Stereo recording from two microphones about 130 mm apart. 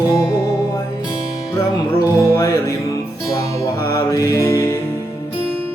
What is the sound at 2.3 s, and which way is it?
Music, 25° left (ahead or behind).